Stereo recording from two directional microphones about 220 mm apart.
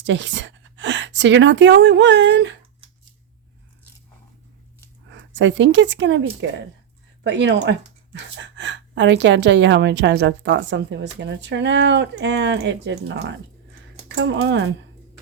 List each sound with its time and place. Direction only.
0.0 s a woman's voice: 55° right (ahead or behind)
5.0 s speech: 55° right (ahead or behind)
7.3 s a woman's voice: 55° right (ahead or behind)